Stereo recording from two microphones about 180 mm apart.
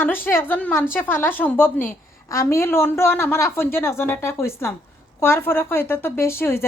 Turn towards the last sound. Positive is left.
turn(degrees=15)  # may be behind; listen again after turning